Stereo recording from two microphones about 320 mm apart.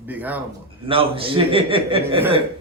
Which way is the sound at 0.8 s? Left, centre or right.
Centre.